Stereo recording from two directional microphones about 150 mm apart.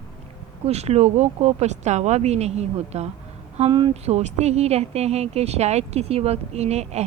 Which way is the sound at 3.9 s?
45° right (ahead or behind).